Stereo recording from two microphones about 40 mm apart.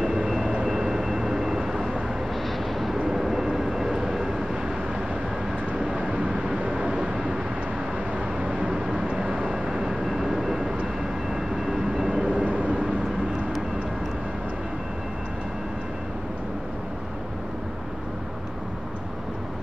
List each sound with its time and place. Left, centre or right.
0.7 s vehicle: centre
5.8 s vehicle: centre
6.0 s vehicle: right
8.4 s vehicle: right
9.7 s vehicle: centre
11.3 s train: centre
12.1 s vehicle: right